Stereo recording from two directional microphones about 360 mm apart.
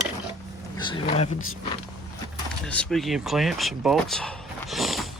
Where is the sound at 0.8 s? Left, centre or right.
Centre.